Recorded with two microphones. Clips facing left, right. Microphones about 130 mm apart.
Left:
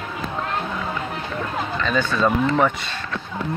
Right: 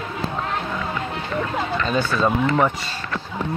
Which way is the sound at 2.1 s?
5° right (ahead or behind).